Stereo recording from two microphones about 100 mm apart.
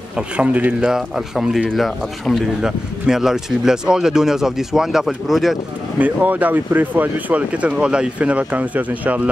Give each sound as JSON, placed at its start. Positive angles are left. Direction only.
{"t": 0.4, "sound": "speech", "side_deg": -15}
{"t": 0.9, "sound": "speech", "side_deg": -5}
{"t": 5.9, "sound": "speech", "side_deg": -15}